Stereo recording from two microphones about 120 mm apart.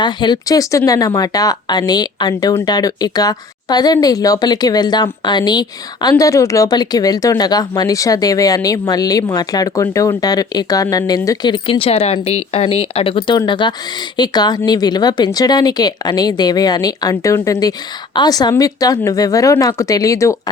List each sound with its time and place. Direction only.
0.0 s a woman's voice: 40° left (ahead or behind)